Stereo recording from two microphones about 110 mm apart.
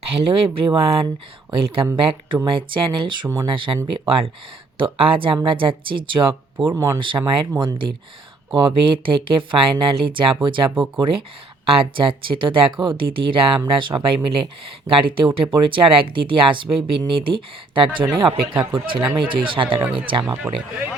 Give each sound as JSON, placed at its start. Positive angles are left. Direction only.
{"t": 0.0, "sound": "speech", "side_deg": -60}
{"t": 3.2, "sound": "speech", "side_deg": -35}
{"t": 3.5, "sound": "speech", "side_deg": -50}
{"t": 6.7, "sound": "speech", "side_deg": -30}
{"t": 7.0, "sound": "speech", "side_deg": -50}
{"t": 20.2, "sound": "speech", "side_deg": -10}